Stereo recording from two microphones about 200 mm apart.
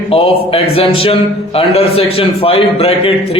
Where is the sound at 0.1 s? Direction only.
30° left (ahead or behind).